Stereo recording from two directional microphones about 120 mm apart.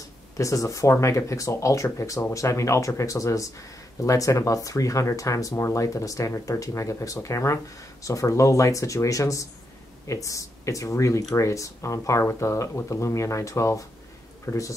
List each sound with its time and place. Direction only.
0.4 s speech: 25° left (ahead or behind)